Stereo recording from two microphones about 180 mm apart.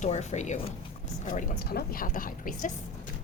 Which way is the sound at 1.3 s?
55° left (ahead or behind).